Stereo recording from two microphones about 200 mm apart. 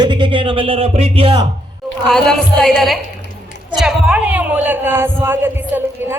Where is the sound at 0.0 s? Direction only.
25° right (ahead or behind).